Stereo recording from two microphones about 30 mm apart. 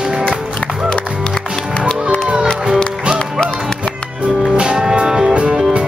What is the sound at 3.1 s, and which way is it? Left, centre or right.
Music, right.